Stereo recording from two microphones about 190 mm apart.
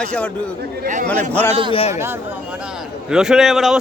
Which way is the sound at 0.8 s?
45° right (ahead or behind).